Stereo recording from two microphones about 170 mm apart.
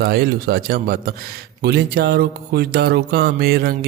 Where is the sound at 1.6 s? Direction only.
75° right (ahead or behind).